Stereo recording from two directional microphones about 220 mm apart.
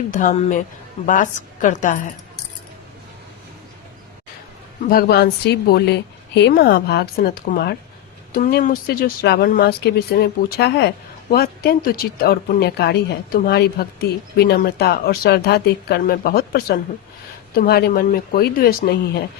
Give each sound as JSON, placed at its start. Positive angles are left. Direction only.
{"t": 0.1, "sound": "a woman's voice", "side_deg": 35}
{"t": 4.9, "sound": "speech", "side_deg": 45}